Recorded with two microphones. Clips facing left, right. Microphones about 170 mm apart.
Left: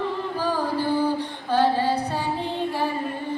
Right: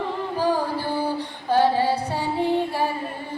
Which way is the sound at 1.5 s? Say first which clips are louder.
Right 2 dB; 10° right (ahead or behind).